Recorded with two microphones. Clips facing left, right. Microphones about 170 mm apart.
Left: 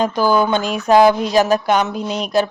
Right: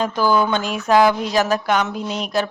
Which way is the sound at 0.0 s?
15° left (ahead or behind).